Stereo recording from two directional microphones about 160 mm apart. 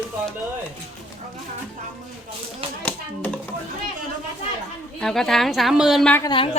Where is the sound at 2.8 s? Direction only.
10° left (ahead or behind).